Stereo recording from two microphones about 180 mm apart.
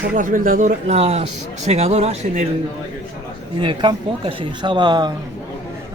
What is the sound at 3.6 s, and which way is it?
Speech, 25° right (ahead or behind).